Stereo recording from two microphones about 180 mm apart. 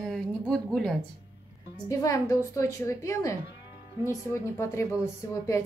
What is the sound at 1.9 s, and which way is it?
A woman's voice, 20° left (ahead or behind).